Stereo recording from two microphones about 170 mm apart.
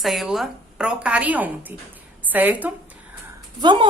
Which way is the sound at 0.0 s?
Centre (ahead or behind).